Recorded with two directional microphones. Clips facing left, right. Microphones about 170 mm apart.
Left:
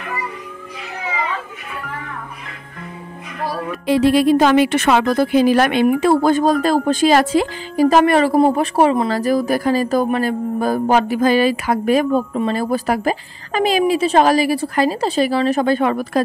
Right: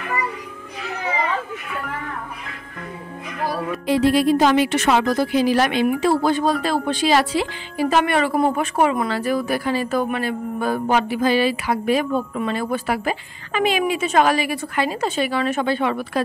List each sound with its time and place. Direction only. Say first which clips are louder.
3.8 s a woman's voice: left 3 dB; 70° left (ahead or behind); by 16.2 s 45° left (ahead or behind)